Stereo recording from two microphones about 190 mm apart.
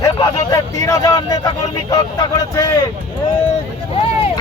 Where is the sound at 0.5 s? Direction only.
15° left (ahead or behind).